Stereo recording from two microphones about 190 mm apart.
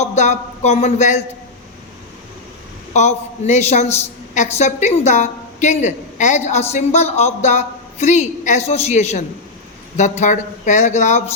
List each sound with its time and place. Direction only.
0.0 s a man's voice: 35° left (ahead or behind)
2.9 s a woman's voice: 35° left (ahead or behind)